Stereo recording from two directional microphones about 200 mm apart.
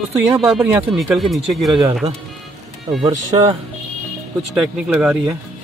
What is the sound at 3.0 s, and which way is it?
Speech, 25° right (ahead or behind).